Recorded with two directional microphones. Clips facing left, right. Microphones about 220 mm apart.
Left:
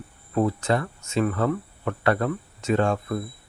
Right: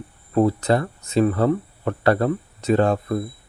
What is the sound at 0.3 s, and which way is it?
Speech, 35° right (ahead or behind).